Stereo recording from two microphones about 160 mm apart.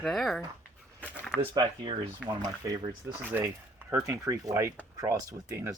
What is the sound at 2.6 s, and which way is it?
Speech, 20° right (ahead or behind).